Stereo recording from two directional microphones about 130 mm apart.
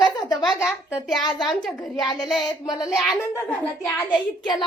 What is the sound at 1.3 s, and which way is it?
Speech, 5° left (ahead or behind).